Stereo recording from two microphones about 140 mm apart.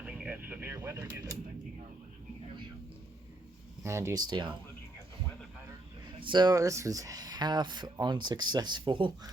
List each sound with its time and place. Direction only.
0.0 s a sound: 10° right (ahead or behind)
3.8 s speech: 20° right (ahead or behind)
4.3 s speech: 30° right (ahead or behind)
6.1 s speech: 35° right (ahead or behind)